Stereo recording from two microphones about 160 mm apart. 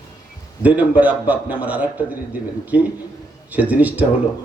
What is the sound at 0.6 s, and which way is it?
A man's voice, 10° right (ahead or behind).